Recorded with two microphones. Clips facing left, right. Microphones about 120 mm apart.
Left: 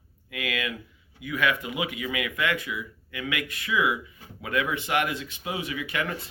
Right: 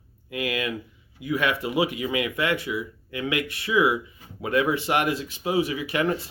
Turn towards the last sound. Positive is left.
turn(degrees=-30)  # may be behind; listen again after turning